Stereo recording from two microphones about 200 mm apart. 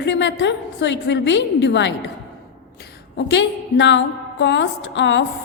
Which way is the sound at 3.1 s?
60° left (ahead or behind).